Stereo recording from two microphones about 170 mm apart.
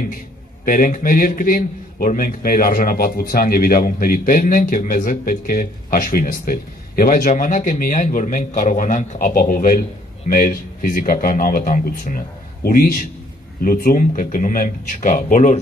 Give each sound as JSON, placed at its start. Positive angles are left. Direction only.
{"t": 0.7, "sound": "a man's voice", "side_deg": 55}